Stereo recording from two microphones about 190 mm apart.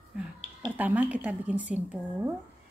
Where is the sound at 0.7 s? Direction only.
5° right (ahead or behind).